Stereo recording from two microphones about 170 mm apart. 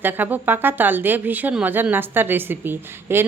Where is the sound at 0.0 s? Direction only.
10° right (ahead or behind).